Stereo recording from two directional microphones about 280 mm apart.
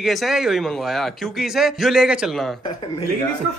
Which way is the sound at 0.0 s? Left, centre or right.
Centre.